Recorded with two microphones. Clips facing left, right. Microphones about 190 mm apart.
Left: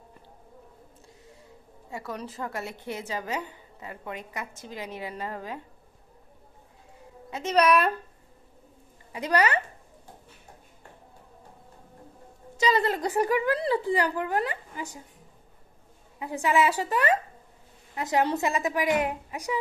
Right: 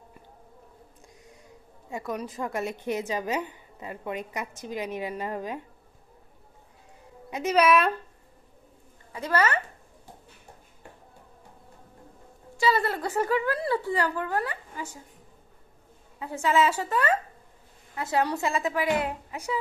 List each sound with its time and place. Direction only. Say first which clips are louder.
1.9 s a woman's voice: right 3 dB; 15° right (ahead or behind)
7.2 s a woman's voice: right 3 dB; 15° right (ahead or behind)
7.5 s speech: even; centre (ahead or behind)
9.1 s a woman's voice: left 1 dB; 15° left (ahead or behind)
12.5 s a woman's voice: left 1 dB; 20° left (ahead or behind)
16.2 s a woman's voice: even; 15° left (ahead or behind)